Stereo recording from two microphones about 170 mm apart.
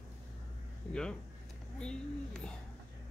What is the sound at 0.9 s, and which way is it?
Speech, 5° left (ahead or behind).